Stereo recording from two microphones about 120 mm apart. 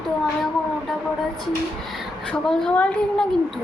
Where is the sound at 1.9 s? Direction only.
5° left (ahead or behind).